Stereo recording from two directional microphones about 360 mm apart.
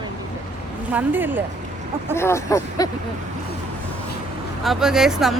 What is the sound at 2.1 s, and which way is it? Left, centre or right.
Speech, centre.